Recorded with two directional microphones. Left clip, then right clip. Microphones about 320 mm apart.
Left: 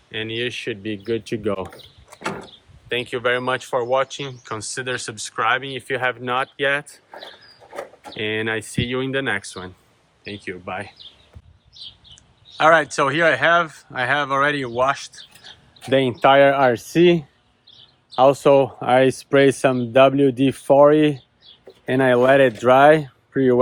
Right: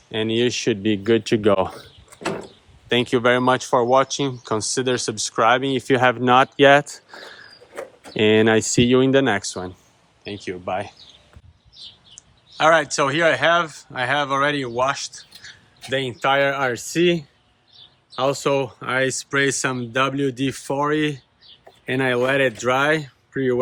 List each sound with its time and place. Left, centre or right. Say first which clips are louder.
0.1 s speech: right 4 dB; centre
2.9 s speech: right 3 dB; centre
7.7 s a sound: left 2 dB; centre
8.1 s speech: right 8 dB; centre
12.1 s speech: left 2 dB; centre
15.9 s speech: left 5 dB; centre